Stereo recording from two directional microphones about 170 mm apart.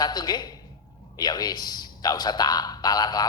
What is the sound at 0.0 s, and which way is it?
A man's voice, 25° left (ahead or behind).